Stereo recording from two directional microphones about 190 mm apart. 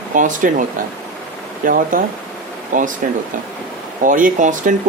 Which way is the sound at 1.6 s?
45° right (ahead or behind).